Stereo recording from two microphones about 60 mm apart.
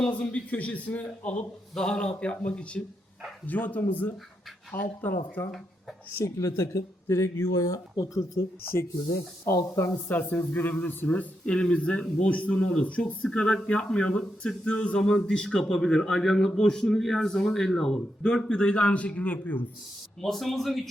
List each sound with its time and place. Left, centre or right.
0.1 s speech: left
1.7 s speech: centre; by 5.4 s left
6.2 s speech: left
9.6 s speech: left
10.1 s a man's voice: left
20.2 s a man's voice: centre